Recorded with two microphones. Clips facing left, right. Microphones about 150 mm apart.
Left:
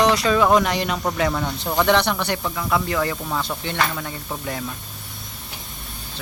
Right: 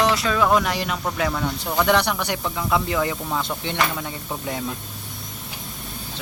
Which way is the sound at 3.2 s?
5° right (ahead or behind).